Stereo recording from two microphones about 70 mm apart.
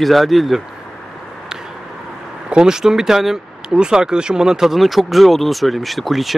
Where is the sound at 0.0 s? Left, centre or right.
Centre.